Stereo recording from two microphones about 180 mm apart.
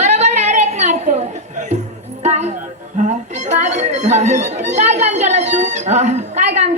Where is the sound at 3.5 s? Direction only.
40° right (ahead or behind).